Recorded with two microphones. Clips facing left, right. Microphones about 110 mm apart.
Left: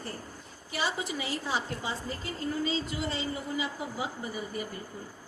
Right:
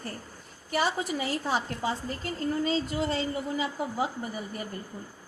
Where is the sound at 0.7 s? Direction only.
45° right (ahead or behind).